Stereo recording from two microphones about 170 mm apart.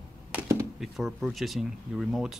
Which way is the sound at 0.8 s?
Centre (ahead or behind).